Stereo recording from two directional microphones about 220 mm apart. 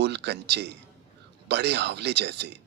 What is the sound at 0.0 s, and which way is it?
A man's voice, 50° right (ahead or behind).